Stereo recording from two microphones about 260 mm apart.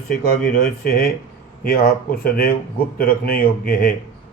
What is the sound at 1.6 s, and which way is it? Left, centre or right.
Speech, left.